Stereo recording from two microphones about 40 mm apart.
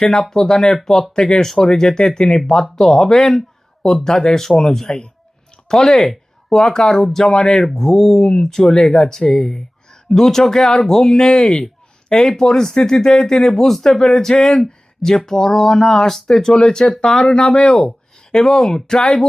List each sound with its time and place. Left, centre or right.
0.0 s speech: left
11.4 s a sound: centre
12.4 s speech: centre